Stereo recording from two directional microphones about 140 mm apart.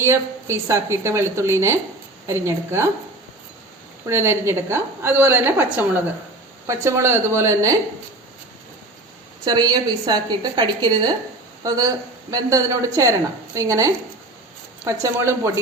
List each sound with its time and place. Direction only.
0.0 s a woman's voice: 20° right (ahead or behind)
4.0 s a woman's voice: 20° right (ahead or behind)
9.4 s a woman's voice: 30° right (ahead or behind)